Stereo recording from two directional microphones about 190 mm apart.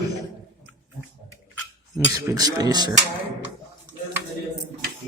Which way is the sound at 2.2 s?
15° right (ahead or behind).